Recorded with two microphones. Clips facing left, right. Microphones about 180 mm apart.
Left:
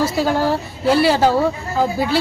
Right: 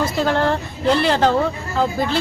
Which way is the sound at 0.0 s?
10° left (ahead or behind).